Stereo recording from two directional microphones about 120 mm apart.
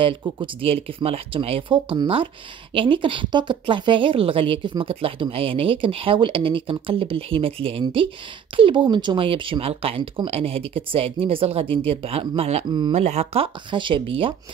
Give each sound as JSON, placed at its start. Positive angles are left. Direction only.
{"t": 0.4, "sound": "speech", "side_deg": -50}
{"t": 12.6, "sound": "speech", "side_deg": -40}
{"t": 12.9, "sound": "speech", "side_deg": -65}
{"t": 13.7, "sound": "speech", "side_deg": -45}